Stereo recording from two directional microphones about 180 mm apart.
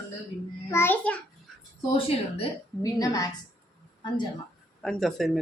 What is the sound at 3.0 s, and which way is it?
Speech, 20° left (ahead or behind).